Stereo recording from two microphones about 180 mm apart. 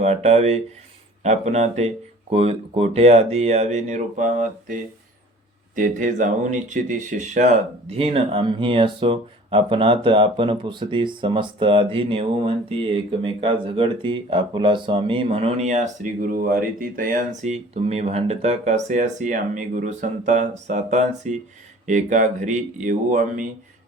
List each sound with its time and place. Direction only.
0.0 s speech: 35° right (ahead or behind)